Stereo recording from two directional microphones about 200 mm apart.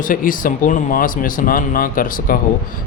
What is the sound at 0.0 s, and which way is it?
Speech, 45° left (ahead or behind).